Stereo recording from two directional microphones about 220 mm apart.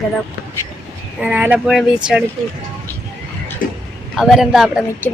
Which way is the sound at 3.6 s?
40° left (ahead or behind).